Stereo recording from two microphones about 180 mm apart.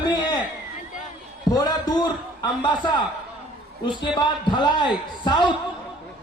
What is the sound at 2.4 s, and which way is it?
A man's voice, 25° left (ahead or behind).